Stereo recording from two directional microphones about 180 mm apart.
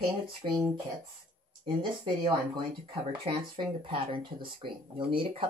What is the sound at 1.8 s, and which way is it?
Speech, 25° right (ahead or behind).